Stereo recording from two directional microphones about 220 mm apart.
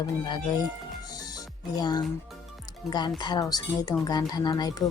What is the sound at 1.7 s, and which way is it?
Speech, 20° left (ahead or behind).